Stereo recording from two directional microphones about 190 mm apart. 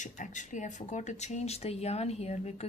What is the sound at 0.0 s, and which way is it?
Speech, 40° left (ahead or behind).